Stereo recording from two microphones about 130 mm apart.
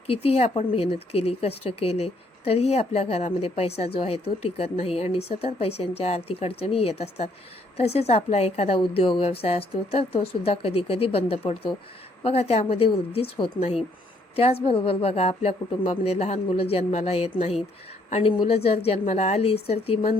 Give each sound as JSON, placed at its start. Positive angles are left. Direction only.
{"t": 0.1, "sound": "speech", "side_deg": 50}
{"t": 18.1, "sound": "speech", "side_deg": 45}